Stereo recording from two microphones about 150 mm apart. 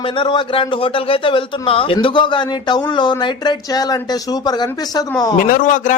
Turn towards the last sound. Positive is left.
turn(degrees=60)  # may be behind; listen again after turning